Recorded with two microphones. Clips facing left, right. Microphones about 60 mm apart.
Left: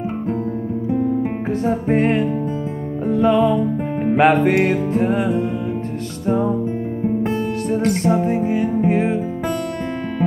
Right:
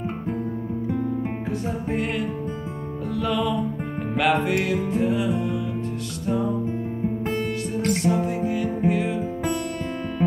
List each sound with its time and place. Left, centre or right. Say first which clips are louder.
1.7 s music: left 11 dB; left
4.9 s music: left 5 dB; left
8.0 s music: left 5 dB; left